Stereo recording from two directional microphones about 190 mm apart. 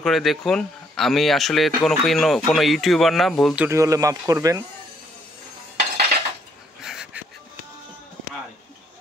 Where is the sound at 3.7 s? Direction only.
15° right (ahead or behind).